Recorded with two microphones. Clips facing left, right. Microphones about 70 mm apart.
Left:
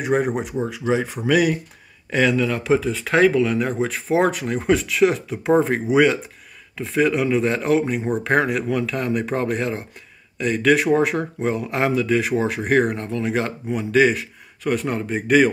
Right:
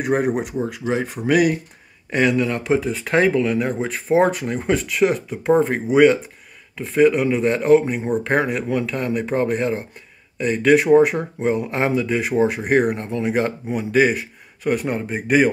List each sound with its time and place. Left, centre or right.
0.0 s speech: centre
2.0 s speech: centre
11.7 s speech: centre
12.9 s speech: centre